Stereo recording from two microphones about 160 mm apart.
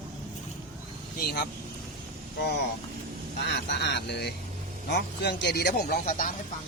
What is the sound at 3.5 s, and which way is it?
Speech, 90° left.